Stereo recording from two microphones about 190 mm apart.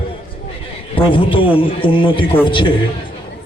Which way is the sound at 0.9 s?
25° left (ahead or behind).